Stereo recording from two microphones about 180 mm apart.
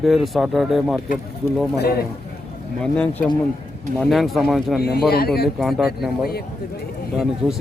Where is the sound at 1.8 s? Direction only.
60° left (ahead or behind).